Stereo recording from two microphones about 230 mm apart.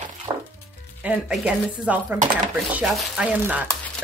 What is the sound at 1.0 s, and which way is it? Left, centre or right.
Speech, centre.